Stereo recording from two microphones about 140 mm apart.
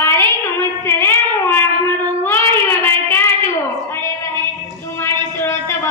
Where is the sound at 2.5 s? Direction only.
15° left (ahead or behind).